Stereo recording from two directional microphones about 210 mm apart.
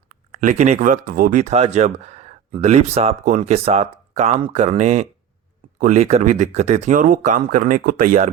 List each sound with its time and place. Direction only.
0.1 s speech: 40° right (ahead or behind)